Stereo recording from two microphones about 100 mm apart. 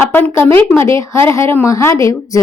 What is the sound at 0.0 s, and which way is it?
A woman's voice, 20° left (ahead or behind).